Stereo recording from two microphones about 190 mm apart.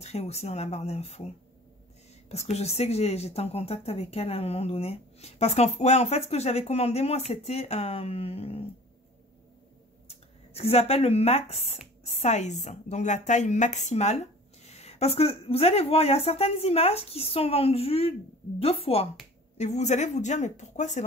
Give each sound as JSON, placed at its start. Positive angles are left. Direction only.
{"t": 0.0, "sound": "a woman's voice", "side_deg": 35}
{"t": 2.5, "sound": "a woman's voice", "side_deg": 35}
{"t": 10.0, "sound": "a woman's voice", "side_deg": 30}